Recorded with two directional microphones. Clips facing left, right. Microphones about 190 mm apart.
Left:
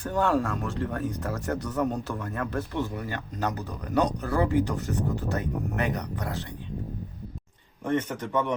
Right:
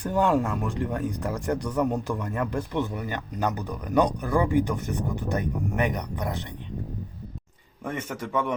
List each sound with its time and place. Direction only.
0.0 s speech: 15° right (ahead or behind)
7.9 s speech: 10° right (ahead or behind)